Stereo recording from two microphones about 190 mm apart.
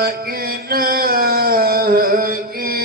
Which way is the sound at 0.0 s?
50° right (ahead or behind).